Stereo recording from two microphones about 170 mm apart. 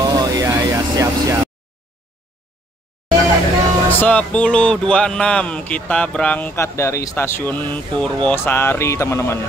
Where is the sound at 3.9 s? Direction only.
10° left (ahead or behind).